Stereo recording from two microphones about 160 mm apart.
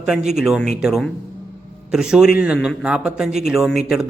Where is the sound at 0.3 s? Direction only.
5° right (ahead or behind).